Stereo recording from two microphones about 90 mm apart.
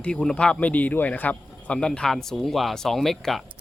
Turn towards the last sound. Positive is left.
turn(degrees=0)  # may be behind; listen again after turning